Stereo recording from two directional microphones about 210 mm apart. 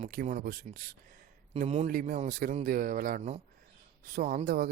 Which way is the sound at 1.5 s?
30° right (ahead or behind).